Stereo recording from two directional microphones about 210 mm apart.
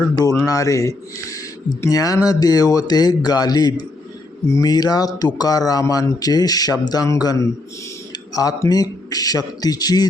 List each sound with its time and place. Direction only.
0.1 s speech: 15° left (ahead or behind)